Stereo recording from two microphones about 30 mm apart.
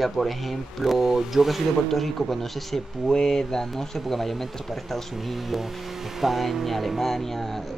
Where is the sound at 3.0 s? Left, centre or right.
Centre.